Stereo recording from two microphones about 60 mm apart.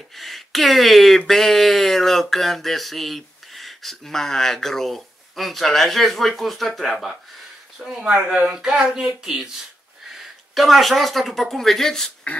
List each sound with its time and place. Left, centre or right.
0.1 s speech: centre
8.0 s speech: centre